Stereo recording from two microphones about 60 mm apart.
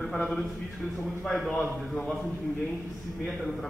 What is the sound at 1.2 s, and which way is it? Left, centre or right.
Speech, centre.